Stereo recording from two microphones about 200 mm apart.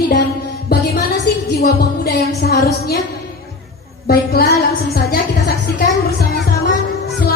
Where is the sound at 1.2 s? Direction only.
55° left (ahead or behind).